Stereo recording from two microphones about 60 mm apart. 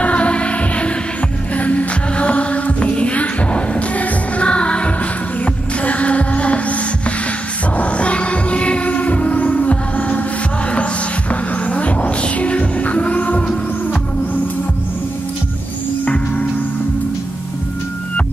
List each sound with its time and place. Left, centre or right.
0.0 s music: left